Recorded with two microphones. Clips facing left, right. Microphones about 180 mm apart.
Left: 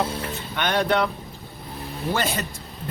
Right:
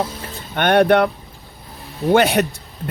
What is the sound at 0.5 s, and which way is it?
Speech, 60° right (ahead or behind).